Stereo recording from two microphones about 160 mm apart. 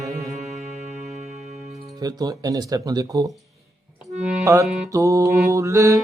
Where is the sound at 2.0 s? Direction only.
25° right (ahead or behind).